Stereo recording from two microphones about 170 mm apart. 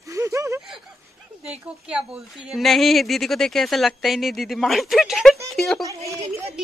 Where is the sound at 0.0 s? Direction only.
20° right (ahead or behind).